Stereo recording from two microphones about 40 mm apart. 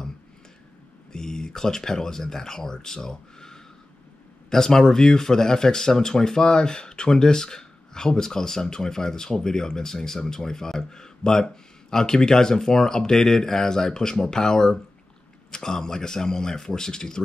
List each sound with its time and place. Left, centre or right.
1.1 s speech: centre